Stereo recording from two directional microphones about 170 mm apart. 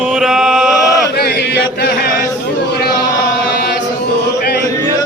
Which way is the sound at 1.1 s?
75° left (ahead or behind).